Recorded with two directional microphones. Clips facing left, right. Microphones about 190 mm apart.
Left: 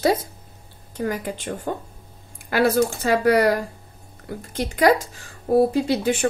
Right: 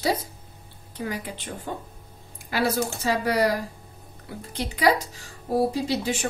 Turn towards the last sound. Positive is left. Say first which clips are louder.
# left 5 dB
turn(degrees=55)  # may be behind; listen again after turning